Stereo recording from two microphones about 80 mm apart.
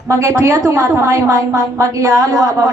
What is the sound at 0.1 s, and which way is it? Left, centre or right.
A woman's voice, right.